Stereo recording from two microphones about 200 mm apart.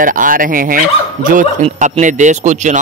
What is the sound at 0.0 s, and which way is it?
Speech, 40° right (ahead or behind).